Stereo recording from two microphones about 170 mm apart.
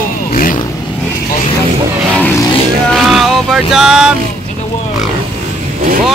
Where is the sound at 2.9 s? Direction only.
Centre (ahead or behind).